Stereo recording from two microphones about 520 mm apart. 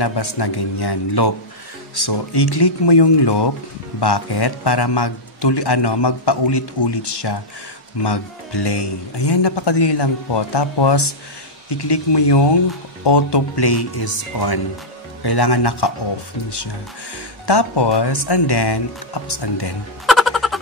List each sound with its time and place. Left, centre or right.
0.0 s a man's voice: left
17.5 s a man's voice: left
20.1 s music: centre